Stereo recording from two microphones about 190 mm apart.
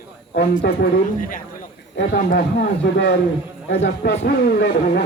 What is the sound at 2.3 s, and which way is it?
Speech, 60° left (ahead or behind).